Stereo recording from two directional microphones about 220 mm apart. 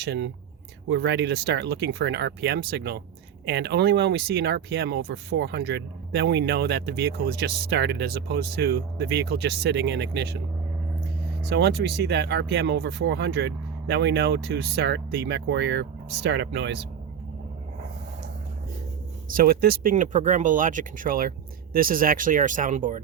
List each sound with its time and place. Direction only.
0.0 s speech: 50° right (ahead or behind)
11.4 s speech: 50° right (ahead or behind)
19.3 s speech: 40° right (ahead or behind)